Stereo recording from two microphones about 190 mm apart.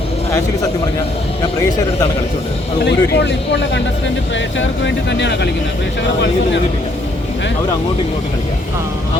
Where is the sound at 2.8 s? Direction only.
60° left (ahead or behind).